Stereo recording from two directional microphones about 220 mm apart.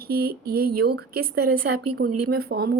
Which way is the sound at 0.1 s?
45° right (ahead or behind).